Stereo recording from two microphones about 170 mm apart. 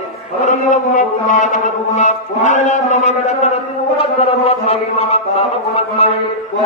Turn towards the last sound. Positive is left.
turn(degrees=35)  # may be behind; listen again after turning